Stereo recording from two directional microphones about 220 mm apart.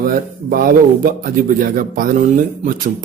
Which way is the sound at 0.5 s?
40° right (ahead or behind).